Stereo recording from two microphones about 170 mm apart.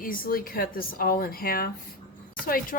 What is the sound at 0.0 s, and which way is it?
Speech, 55° left (ahead or behind).